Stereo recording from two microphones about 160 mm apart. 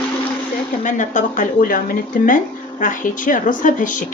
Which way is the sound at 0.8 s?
50° left (ahead or behind).